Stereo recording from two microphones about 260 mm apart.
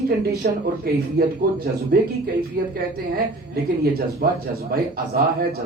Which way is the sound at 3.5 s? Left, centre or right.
Right.